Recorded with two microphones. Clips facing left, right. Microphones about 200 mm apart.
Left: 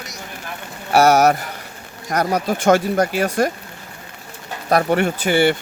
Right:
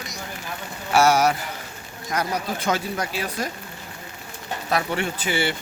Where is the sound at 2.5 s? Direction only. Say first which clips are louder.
Left 13 dB; 75° left (ahead or behind).